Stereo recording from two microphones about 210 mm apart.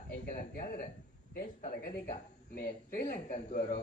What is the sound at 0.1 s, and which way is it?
A man's voice, 40° left (ahead or behind).